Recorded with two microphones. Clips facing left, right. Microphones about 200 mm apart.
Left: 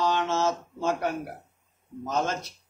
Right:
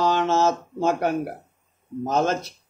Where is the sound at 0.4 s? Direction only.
50° right (ahead or behind).